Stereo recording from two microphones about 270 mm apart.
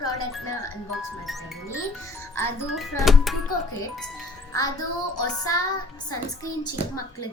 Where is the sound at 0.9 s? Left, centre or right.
Centre.